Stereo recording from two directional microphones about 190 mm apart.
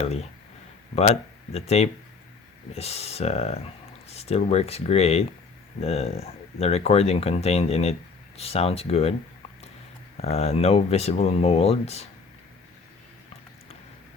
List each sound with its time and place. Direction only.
0.0 s speech: 35° left (ahead or behind)
10.2 s speech: 35° left (ahead or behind)